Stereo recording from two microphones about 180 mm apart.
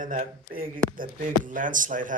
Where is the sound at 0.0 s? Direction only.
50° right (ahead or behind).